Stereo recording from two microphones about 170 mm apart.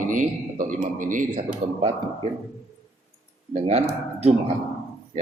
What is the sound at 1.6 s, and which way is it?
Speech, 35° right (ahead or behind).